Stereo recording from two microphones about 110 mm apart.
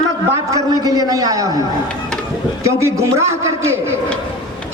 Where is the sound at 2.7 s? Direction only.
25° right (ahead or behind).